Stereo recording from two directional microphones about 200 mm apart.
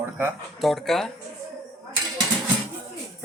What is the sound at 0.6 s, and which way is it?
Speech, centre (ahead or behind).